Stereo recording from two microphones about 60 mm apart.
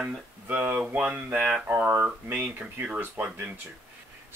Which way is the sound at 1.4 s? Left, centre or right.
Centre.